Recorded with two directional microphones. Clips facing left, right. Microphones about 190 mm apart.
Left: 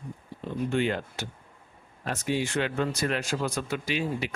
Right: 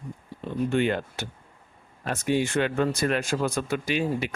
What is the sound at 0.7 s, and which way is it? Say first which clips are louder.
Speech: right 2 dB; 55° right (ahead or behind).